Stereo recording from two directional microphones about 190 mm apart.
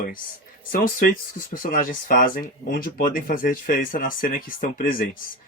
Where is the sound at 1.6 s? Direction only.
45° left (ahead or behind).